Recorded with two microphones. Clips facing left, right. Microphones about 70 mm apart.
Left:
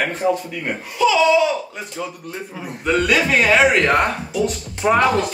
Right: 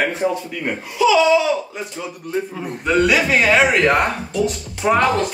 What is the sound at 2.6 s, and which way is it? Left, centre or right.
A man's voice, centre.